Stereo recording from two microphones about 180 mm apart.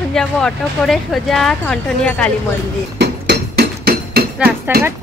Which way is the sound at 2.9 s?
60° right (ahead or behind).